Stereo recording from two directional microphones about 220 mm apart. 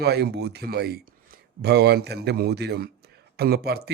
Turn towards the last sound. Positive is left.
turn(degrees=-45)  # may be behind; listen again after turning